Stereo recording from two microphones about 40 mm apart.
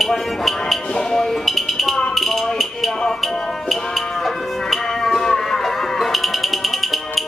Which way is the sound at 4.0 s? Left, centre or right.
Centre.